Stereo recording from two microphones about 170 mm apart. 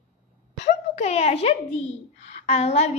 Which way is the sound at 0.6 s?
40° left (ahead or behind).